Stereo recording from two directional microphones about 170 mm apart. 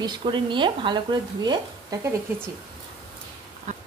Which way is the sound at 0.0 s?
25° right (ahead or behind).